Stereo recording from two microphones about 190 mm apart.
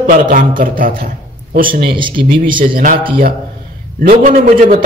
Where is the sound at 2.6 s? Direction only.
50° right (ahead or behind).